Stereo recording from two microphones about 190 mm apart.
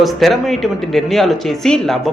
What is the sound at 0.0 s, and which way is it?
Speech, centre (ahead or behind).